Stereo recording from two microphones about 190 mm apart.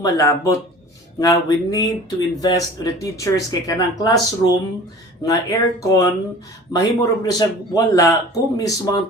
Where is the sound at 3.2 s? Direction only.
20° left (ahead or behind).